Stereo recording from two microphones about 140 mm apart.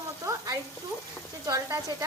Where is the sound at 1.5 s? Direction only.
20° right (ahead or behind).